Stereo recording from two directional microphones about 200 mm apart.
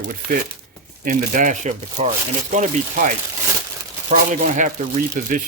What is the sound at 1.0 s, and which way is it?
Speech, 40° right (ahead or behind).